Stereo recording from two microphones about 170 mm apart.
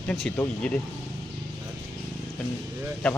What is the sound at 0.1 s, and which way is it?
Speech, 5° left (ahead or behind).